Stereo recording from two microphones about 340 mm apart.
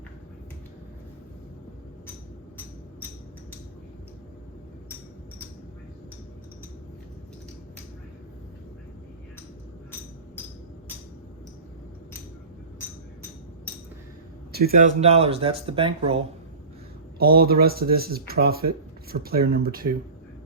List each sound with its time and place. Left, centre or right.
14.5 s speech: right
17.2 s speech: right